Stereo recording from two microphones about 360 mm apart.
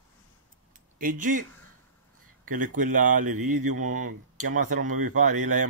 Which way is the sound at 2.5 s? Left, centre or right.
Right.